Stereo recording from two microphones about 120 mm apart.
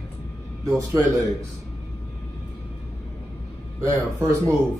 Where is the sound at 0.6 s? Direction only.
30° right (ahead or behind).